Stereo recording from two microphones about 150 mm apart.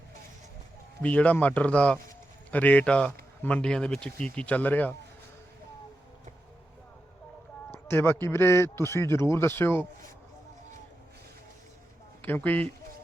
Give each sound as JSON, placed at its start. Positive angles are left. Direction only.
{"t": 1.0, "sound": "a man's voice", "side_deg": 10}
{"t": 7.7, "sound": "a man's voice", "side_deg": 15}
{"t": 12.2, "sound": "a man's voice", "side_deg": 10}